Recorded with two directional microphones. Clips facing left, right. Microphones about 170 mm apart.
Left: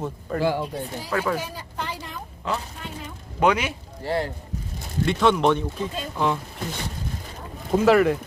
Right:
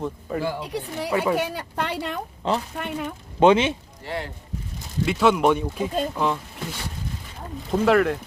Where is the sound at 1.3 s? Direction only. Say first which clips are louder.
Right 6 dB; 70° right (ahead or behind).